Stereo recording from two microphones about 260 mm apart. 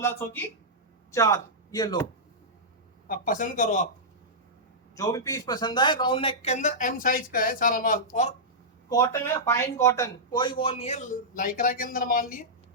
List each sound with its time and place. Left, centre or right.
0.0 s speech: centre
3.1 s speech: left
4.9 s speech: centre
8.9 s speech: centre; by 12.5 s left